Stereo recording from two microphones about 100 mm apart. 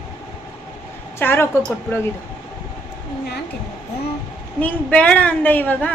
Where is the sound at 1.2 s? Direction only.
25° left (ahead or behind).